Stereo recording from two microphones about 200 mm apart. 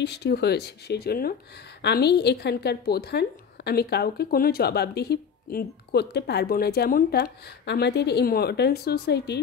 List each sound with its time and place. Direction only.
0.0 s a woman's voice: 55° left (ahead or behind)